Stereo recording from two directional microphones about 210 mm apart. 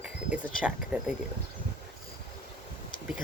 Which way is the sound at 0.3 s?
5° right (ahead or behind).